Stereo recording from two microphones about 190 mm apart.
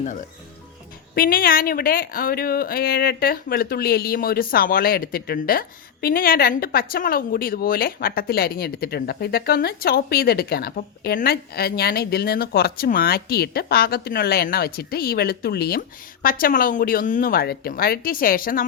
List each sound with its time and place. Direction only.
0.0 s speech: 40° left (ahead or behind)